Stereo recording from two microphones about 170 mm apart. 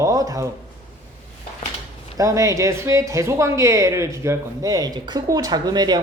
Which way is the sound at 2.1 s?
20° right (ahead or behind).